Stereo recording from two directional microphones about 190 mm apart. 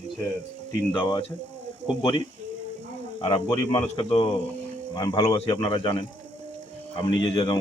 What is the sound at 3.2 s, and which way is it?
A man's voice, 25° left (ahead or behind).